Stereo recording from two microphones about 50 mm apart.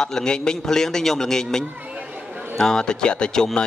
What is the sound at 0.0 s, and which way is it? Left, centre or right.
A man's voice, centre.